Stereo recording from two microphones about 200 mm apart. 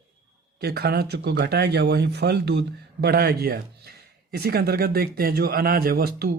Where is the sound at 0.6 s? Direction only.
55° right (ahead or behind).